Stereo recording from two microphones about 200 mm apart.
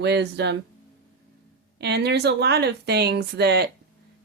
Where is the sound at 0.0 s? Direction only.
60° right (ahead or behind).